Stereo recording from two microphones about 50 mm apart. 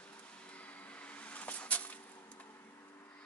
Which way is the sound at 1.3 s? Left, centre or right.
Left.